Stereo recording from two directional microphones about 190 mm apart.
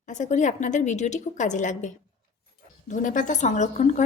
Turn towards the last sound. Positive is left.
turn(degrees=40)  # may be behind; listen again after turning